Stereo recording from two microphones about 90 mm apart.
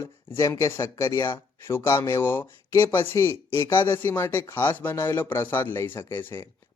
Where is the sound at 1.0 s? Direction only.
45° left (ahead or behind).